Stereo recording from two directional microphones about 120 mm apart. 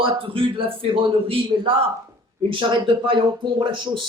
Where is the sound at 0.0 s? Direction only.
50° right (ahead or behind).